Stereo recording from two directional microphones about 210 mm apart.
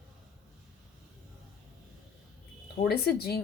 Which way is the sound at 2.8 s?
50° left (ahead or behind).